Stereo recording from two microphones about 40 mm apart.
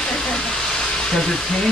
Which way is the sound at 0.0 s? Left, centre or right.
Centre.